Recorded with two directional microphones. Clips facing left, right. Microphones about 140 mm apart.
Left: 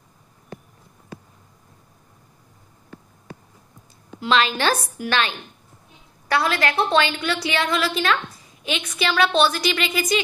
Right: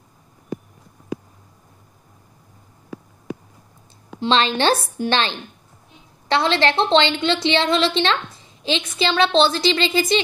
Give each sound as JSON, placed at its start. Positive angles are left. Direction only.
{"t": 4.2, "sound": "a woman's voice", "side_deg": -30}